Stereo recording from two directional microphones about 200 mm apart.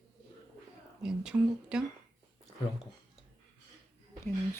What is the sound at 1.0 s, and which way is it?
Speech, 5° right (ahead or behind).